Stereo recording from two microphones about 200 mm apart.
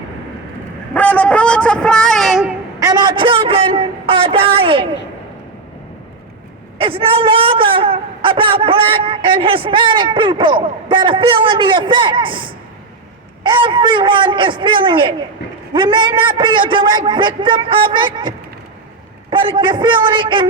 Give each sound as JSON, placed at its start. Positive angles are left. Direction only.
{"t": 0.9, "sound": "a sound", "side_deg": 10}
{"t": 2.8, "sound": "a man's voice", "side_deg": -20}
{"t": 6.7, "sound": "a man's voice", "side_deg": -25}